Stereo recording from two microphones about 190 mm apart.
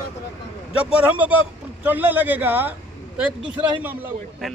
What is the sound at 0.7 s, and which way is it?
A man's voice, 5° right (ahead or behind).